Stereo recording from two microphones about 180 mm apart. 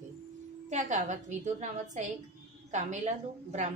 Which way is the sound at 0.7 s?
40° right (ahead or behind).